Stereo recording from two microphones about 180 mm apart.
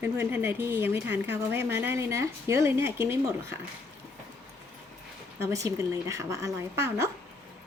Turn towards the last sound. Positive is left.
turn(degrees=-15)  # may be behind; listen again after turning